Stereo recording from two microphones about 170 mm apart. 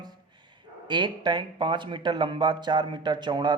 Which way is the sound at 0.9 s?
25° right (ahead or behind).